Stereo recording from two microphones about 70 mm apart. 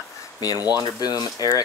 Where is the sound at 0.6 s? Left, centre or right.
Right.